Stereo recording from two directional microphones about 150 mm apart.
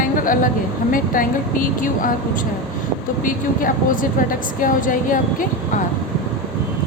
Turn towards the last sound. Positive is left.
turn(degrees=65)  # may be behind; listen again after turning